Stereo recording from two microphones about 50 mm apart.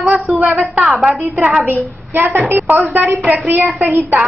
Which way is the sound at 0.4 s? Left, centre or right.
Right.